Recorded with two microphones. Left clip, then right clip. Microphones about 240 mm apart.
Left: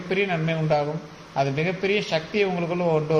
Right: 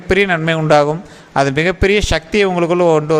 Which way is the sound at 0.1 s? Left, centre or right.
Right.